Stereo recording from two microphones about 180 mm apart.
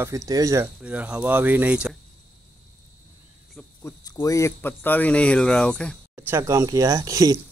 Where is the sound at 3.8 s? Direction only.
20° left (ahead or behind).